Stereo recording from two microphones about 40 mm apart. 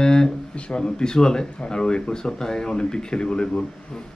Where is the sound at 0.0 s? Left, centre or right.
Centre.